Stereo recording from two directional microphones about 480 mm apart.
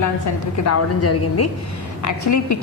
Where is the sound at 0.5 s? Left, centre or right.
Left.